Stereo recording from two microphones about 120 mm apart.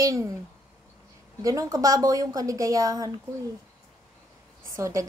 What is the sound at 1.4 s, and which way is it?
A woman's voice, 30° right (ahead or behind).